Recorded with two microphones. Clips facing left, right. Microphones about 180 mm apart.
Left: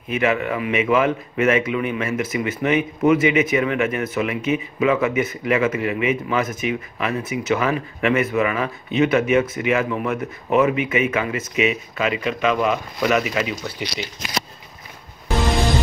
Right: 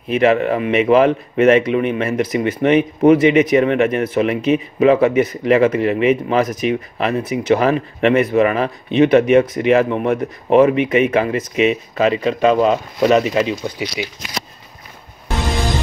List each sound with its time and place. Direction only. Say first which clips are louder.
0.2 s speech: right 6 dB; 35° right (ahead or behind)